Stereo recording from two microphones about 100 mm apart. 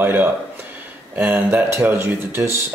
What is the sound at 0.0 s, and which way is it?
Speech, 20° right (ahead or behind).